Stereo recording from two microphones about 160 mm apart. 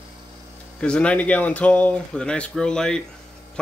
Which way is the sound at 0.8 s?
5° left (ahead or behind).